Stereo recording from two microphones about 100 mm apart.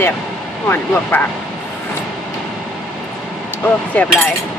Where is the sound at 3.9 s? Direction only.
15° left (ahead or behind).